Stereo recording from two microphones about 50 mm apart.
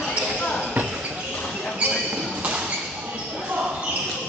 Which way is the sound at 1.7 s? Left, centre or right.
Right.